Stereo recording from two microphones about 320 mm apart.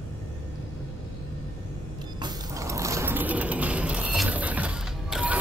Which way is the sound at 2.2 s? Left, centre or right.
Centre.